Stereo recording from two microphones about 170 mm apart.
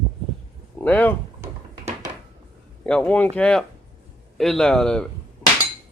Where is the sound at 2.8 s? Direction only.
5° left (ahead or behind).